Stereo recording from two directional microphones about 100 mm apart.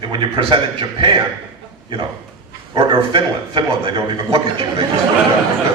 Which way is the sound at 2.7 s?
55° right (ahead or behind).